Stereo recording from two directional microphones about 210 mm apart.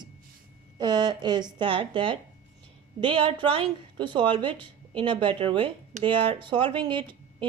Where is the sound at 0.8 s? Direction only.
20° right (ahead or behind).